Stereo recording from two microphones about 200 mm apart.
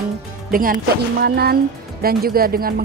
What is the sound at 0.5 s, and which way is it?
Speech, 45° right (ahead or behind).